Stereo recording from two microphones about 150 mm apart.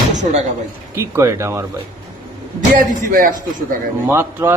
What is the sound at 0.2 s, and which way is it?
Speech, 50° right (ahead or behind).